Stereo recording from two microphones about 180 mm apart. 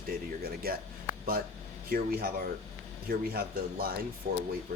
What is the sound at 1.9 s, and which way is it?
A man's voice, 55° right (ahead or behind).